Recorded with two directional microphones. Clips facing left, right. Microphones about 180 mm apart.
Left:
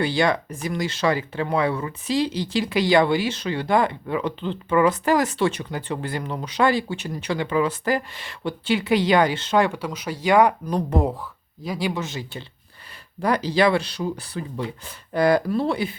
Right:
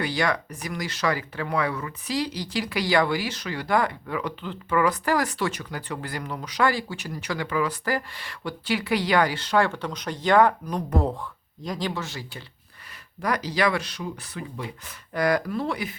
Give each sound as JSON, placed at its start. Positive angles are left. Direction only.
{"t": 0.0, "sound": "speech", "side_deg": 25}
{"t": 10.7, "sound": "speech", "side_deg": 30}
{"t": 11.0, "sound": "speech", "side_deg": 5}